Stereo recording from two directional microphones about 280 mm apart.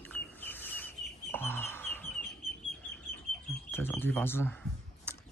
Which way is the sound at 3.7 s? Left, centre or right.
Centre.